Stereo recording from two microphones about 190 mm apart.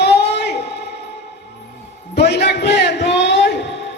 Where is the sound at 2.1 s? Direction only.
60° left (ahead or behind).